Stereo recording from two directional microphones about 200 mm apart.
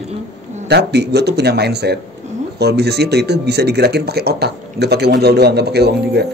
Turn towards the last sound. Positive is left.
turn(degrees=-55)  # may be behind; listen again after turning